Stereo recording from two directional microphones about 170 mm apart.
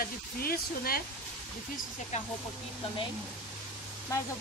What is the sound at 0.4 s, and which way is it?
Speech, 60° left (ahead or behind).